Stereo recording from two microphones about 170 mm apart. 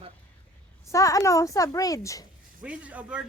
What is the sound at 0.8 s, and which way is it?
A woman's voice, 20° left (ahead or behind).